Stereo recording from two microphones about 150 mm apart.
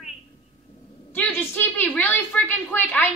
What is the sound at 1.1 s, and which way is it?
A woman's voice, 15° left (ahead or behind).